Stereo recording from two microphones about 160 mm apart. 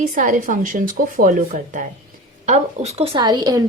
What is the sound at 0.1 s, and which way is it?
Speech, 60° right (ahead or behind).